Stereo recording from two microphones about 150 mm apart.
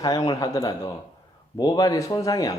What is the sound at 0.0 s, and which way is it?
Speech, 25° left (ahead or behind).